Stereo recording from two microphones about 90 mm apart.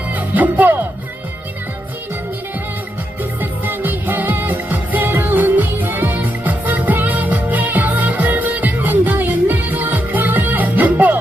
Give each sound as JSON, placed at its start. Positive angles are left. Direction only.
{"t": 0.1, "sound": "music", "side_deg": -20}
{"t": 3.4, "sound": "music of asia", "side_deg": -20}